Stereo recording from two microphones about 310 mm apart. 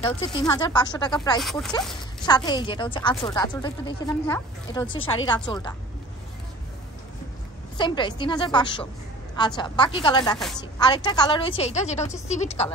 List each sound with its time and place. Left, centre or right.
0.0 s speech: centre
1.4 s a woman's voice: centre
2.2 s speech: centre
7.7 s speech: centre
10.3 s a woman's voice: centre
10.6 s a woman's voice: centre